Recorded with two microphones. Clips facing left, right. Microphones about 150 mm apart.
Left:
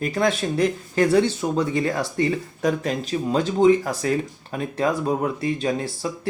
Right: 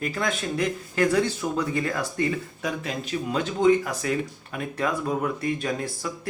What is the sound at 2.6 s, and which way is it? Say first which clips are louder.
Speech: left 8 dB; 40° left (ahead or behind).